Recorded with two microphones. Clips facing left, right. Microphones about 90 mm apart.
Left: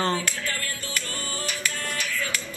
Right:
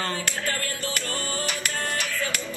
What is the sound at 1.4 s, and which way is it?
Music, 50° right (ahead or behind).